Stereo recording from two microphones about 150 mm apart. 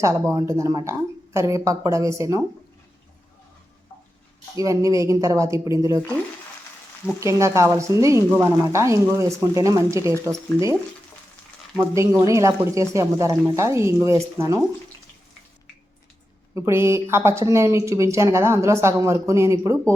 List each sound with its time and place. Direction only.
0.0 s a woman's voice: 20° right (ahead or behind)
4.5 s a woman's voice: 20° right (ahead or behind)
7.2 s a woman's voice: 20° right (ahead or behind)
12.2 s a woman's voice: 20° right (ahead or behind)
16.6 s a woman's voice: 20° right (ahead or behind)